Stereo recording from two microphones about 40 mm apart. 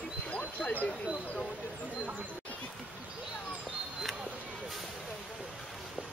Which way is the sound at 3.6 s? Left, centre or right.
Centre.